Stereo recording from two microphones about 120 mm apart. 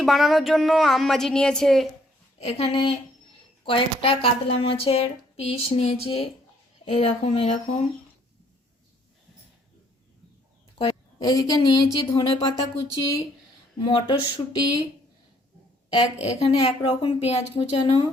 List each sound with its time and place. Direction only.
0.0 s speech: centre (ahead or behind)
2.4 s a woman's voice: 55° left (ahead or behind)
11.2 s speech: 35° left (ahead or behind)
13.8 s speech: 40° left (ahead or behind)
16.4 s speech: 60° left (ahead or behind)